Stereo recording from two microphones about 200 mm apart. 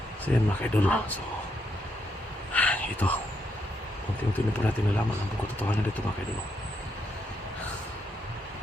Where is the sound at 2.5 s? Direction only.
5° left (ahead or behind).